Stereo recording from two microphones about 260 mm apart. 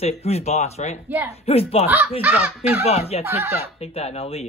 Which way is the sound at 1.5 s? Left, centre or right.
Left.